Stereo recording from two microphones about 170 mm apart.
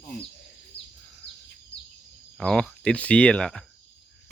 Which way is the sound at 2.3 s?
5° left (ahead or behind).